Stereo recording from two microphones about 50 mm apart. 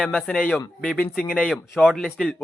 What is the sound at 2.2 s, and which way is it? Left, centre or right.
Speech, centre.